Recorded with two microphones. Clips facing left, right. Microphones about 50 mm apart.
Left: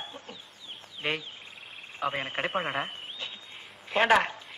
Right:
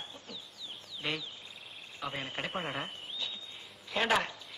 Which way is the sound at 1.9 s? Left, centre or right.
Left.